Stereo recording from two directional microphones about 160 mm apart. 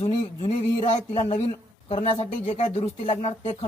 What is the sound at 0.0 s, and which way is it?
A man's voice, 40° left (ahead or behind).